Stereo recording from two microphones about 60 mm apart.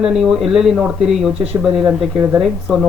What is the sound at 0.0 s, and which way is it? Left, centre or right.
Speech, centre.